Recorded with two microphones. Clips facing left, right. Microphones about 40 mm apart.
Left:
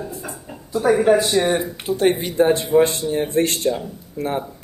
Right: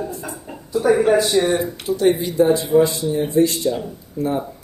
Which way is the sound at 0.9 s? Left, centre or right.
Centre.